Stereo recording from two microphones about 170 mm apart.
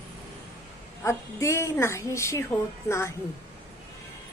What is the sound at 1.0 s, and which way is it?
Speech, 15° left (ahead or behind).